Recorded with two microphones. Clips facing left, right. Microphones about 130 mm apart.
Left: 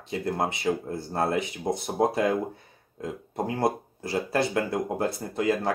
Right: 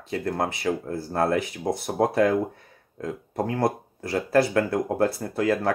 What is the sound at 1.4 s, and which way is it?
Speech, centre (ahead or behind).